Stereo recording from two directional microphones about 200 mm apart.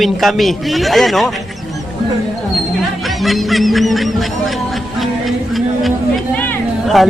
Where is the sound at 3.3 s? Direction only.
Centre (ahead or behind).